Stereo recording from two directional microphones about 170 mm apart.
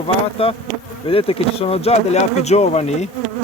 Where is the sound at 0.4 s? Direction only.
35° left (ahead or behind).